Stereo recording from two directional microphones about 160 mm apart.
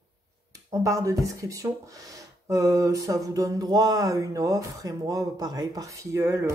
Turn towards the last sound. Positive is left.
turn(degrees=-20)  # may be behind; listen again after turning